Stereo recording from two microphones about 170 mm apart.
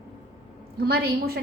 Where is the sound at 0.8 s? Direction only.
65° right (ahead or behind).